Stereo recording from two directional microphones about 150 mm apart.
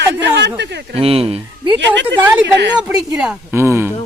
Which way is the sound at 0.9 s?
40° right (ahead or behind).